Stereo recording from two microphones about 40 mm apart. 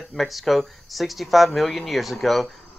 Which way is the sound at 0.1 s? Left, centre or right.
Centre.